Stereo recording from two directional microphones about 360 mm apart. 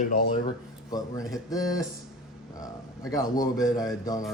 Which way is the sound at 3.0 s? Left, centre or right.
Centre.